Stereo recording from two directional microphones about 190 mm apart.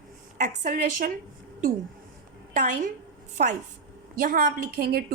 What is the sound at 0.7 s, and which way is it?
Speech, 45° right (ahead or behind).